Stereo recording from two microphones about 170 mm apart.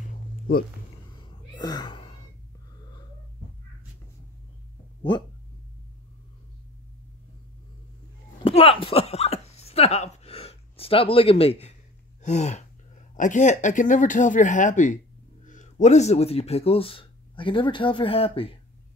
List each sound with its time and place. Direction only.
0.5 s speech: 60° left (ahead or behind)
1.6 s speech: 25° left (ahead or behind)
8.5 s a sound: 35° left (ahead or behind)
12.2 s speech: 40° left (ahead or behind)